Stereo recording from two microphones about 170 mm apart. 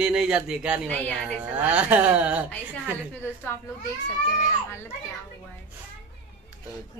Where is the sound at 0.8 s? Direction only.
5° left (ahead or behind).